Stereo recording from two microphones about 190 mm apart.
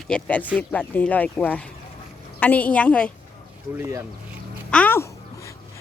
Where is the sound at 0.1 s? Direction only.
5° left (ahead or behind).